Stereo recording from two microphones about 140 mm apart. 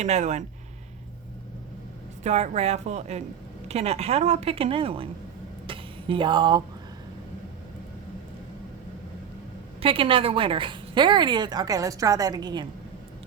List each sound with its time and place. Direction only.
0.0 s speech: 55° right (ahead or behind)
2.2 s a woman's voice: 50° right (ahead or behind)
5.6 s a sound: 35° right (ahead or behind)
9.8 s a woman's voice: 40° right (ahead or behind)